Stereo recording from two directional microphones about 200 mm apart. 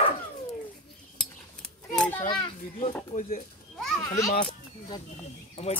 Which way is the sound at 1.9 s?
5° left (ahead or behind).